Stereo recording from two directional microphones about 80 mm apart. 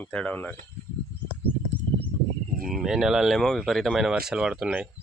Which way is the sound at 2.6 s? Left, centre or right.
Centre.